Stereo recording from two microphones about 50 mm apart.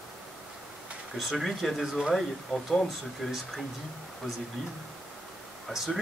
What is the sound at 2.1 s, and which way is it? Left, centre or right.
Speech, centre.